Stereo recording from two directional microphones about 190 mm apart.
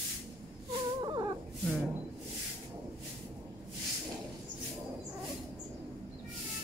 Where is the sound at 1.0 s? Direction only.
20° right (ahead or behind).